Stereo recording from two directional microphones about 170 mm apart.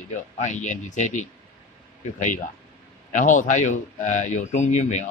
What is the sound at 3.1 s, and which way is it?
Speech, 50° left (ahead or behind).